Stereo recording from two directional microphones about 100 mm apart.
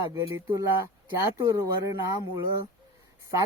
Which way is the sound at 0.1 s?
30° right (ahead or behind).